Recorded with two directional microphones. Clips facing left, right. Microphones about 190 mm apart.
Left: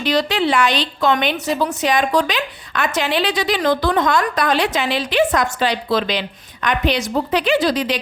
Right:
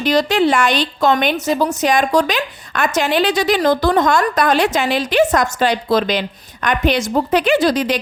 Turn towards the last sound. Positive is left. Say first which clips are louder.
# right 2 dB
turn(degrees=-45)  # may be behind; listen again after turning